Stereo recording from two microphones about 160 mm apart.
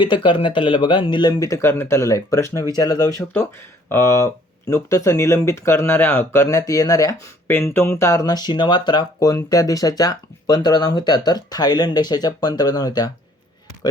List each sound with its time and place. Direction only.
0.0 s speech: 30° left (ahead or behind)
1.3 s speech: 20° left (ahead or behind)